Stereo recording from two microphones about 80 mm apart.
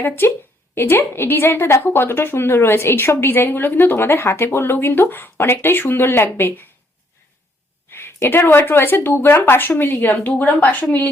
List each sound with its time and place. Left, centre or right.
0.0 s a woman's voice: left
7.9 s a woman's voice: left